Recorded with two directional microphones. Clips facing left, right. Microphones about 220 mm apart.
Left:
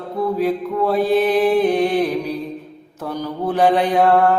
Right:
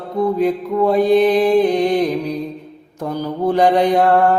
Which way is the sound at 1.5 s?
15° right (ahead or behind).